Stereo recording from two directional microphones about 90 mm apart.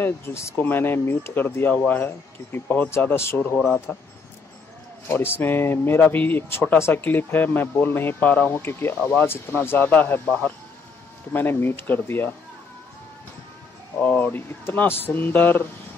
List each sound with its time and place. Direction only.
0.0 s speech: 30° left (ahead or behind)
3.5 s speech: 5° left (ahead or behind)
5.0 s speech: 25° left (ahead or behind)
11.3 s speech: 25° left (ahead or behind)
13.9 s speech: 20° left (ahead or behind)